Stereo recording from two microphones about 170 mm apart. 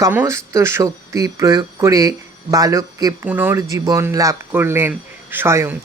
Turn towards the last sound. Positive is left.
turn(degrees=-15)  # may be behind; listen again after turning